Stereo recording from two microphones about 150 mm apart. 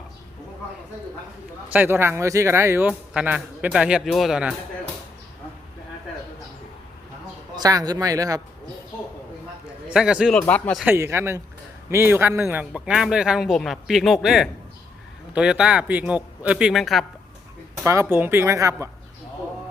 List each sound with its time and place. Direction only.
1.7 s speech: 15° right (ahead or behind)
7.5 s speech: 25° right (ahead or behind)
9.9 s speech: 5° right (ahead or behind)
10.4 s speech: 10° left (ahead or behind)
10.8 s speech: 15° right (ahead or behind); by 17.1 s centre (ahead or behind)
17.8 s speech: 15° right (ahead or behind)